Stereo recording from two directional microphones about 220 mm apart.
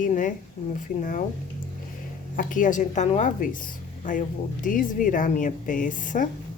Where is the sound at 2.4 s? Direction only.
35° left (ahead or behind).